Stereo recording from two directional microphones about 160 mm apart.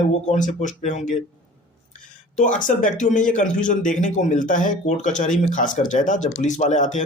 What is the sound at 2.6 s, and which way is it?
Speech, 55° left (ahead or behind).